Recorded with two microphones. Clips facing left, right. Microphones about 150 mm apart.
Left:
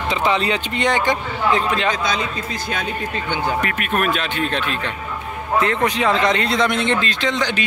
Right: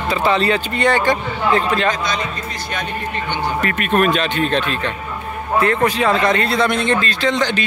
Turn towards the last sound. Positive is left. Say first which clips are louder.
# right 3 dB
turn(degrees=15)  # may be behind; listen again after turning